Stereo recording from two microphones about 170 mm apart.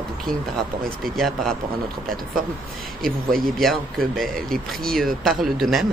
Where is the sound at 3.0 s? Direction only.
60° right (ahead or behind).